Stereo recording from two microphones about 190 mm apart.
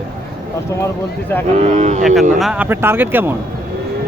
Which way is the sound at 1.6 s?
35° right (ahead or behind).